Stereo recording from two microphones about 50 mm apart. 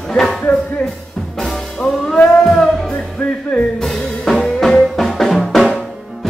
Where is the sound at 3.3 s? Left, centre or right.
Centre.